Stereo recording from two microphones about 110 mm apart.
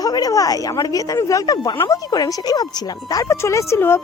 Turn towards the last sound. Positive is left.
turn(degrees=25)  # may be behind; listen again after turning